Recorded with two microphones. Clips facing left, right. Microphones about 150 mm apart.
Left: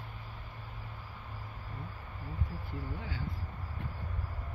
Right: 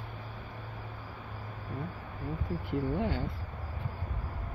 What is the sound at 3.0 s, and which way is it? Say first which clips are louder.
Speech: right 10 dB; 65° right (ahead or behind).